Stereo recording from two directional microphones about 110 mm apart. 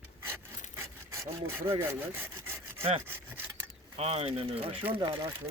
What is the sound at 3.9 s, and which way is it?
Speech, 65° right (ahead or behind).